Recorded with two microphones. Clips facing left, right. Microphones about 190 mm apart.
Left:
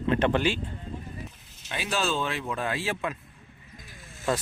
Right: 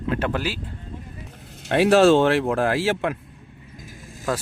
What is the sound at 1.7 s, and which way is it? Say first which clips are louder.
Speech: right 14 dB; 70° right (ahead or behind).